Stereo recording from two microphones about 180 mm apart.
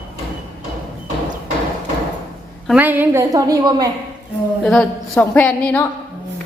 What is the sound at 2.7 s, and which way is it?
A woman's voice, 10° right (ahead or behind).